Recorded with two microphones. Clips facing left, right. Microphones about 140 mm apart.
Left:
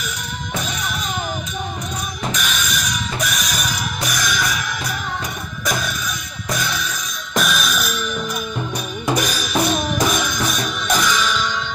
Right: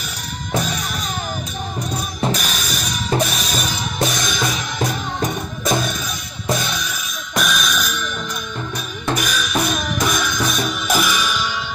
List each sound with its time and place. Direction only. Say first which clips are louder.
2.2 s drum kit: right 2 dB; 35° right (ahead or behind)
5.7 s music: right 3 dB; 25° right (ahead or behind)
7.3 s music: even; centre (ahead or behind)
9.1 s music: left 1 dB; 35° left (ahead or behind)
10.0 s music: even; centre (ahead or behind)